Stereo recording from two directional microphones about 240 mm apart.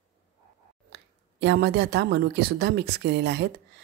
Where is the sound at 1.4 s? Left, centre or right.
Right.